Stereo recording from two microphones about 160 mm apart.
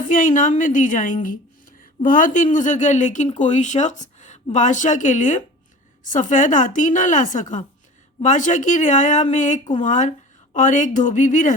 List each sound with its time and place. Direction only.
0.1 s a woman's voice: 55° left (ahead or behind)